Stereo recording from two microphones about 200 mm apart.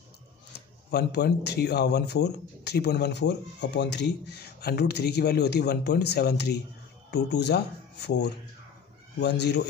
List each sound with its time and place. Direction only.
0.9 s a man's voice: 55° left (ahead or behind)